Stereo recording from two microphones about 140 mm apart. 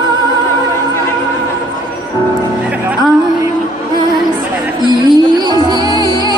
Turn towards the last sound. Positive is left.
turn(degrees=-35)  # may be behind; listen again after turning